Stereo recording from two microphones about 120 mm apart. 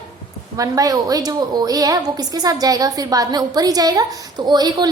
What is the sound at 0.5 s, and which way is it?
A woman's voice, 30° right (ahead or behind).